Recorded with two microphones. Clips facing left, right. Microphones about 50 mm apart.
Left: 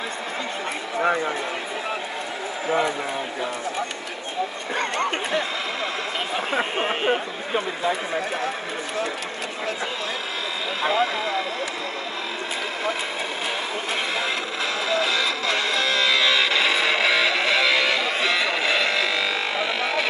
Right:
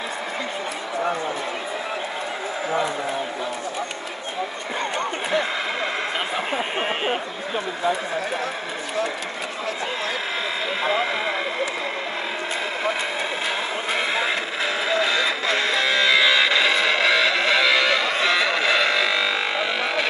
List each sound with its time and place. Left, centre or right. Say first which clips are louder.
6.8 s speech: left 2 dB; centre
10.8 s speech: left 2 dB; right
14.1 s music: right 2 dB; centre